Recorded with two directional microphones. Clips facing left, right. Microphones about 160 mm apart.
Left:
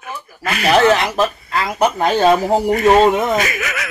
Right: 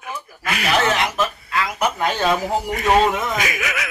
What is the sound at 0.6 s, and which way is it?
Speech, 40° left (ahead or behind).